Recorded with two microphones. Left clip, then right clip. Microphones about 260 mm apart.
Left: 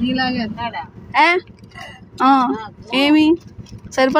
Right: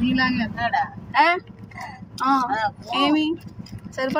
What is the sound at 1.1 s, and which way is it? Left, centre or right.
A woman's voice, centre.